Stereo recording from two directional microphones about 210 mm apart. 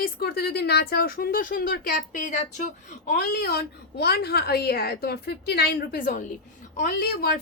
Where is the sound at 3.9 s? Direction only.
50° left (ahead or behind).